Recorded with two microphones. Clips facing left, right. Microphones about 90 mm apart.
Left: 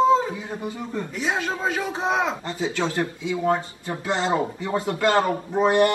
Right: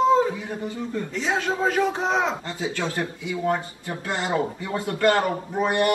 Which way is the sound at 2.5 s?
20° left (ahead or behind).